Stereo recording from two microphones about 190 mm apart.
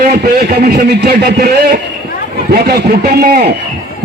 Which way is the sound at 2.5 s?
55° right (ahead or behind).